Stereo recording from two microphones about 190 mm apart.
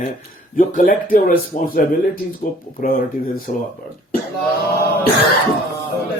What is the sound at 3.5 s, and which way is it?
Speech, 40° left (ahead or behind).